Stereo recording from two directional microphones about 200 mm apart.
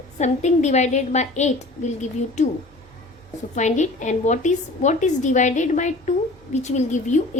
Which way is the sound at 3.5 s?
35° left (ahead or behind).